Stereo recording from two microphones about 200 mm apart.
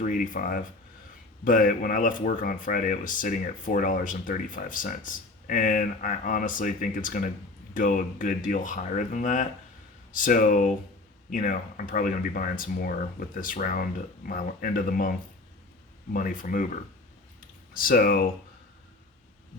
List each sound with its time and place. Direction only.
0.0 s speech: 40° left (ahead or behind)
16.1 s speech: 40° left (ahead or behind)
17.7 s speech: 45° left (ahead or behind)